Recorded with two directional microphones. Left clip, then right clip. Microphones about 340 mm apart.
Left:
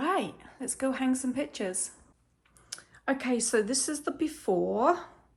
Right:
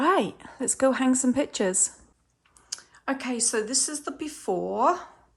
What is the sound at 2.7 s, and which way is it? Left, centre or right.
A woman's voice, centre.